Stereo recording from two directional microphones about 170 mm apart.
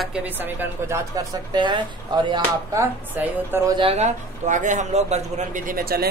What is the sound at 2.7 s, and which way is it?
Speech, 10° right (ahead or behind).